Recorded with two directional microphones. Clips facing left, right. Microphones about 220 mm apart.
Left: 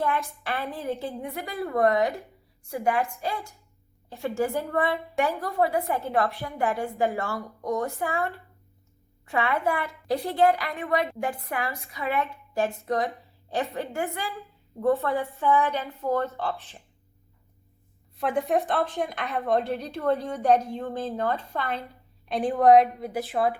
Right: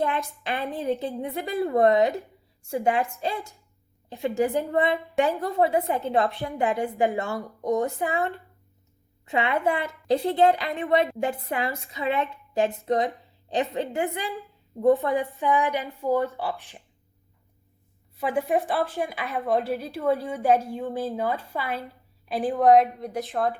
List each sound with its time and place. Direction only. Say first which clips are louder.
0.0 s a woman's voice: right 1 dB; 15° right (ahead or behind)
4.1 s a woman's voice: right 3 dB; 15° right (ahead or behind)
18.2 s a woman's voice: even; centre (ahead or behind)